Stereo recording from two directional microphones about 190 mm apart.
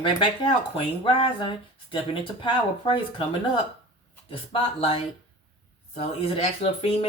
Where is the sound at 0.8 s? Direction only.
30° left (ahead or behind).